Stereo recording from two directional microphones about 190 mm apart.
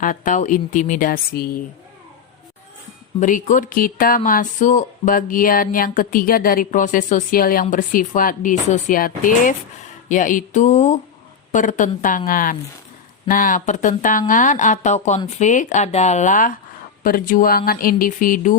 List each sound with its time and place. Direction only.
0.0 s speech: 45° left (ahead or behind)
3.2 s speech: 40° left (ahead or behind)